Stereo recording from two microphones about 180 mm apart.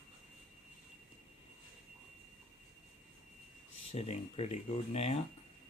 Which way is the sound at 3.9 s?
35° left (ahead or behind).